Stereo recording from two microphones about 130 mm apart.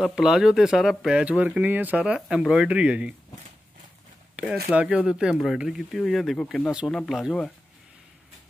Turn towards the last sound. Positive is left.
turn(degrees=5)  # may be behind; listen again after turning